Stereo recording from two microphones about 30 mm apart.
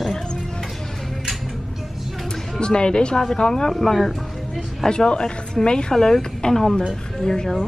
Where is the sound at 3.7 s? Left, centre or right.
Centre.